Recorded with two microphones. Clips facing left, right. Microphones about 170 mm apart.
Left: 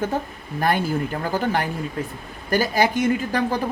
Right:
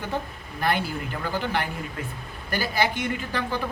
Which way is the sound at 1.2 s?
45° left (ahead or behind).